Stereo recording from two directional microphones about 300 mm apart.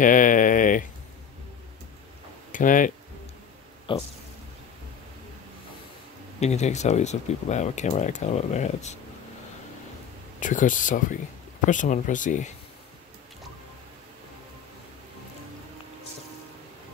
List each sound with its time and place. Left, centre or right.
0.0 s a sound: left
2.5 s speech: left
6.4 s speech: left
10.4 s speech: left